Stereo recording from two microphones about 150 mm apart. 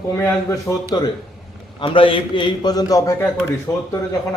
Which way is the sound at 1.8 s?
35° left (ahead or behind).